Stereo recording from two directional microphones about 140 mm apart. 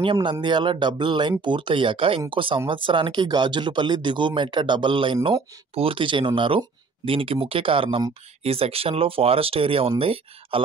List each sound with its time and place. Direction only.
0.0 s speech: 35° right (ahead or behind)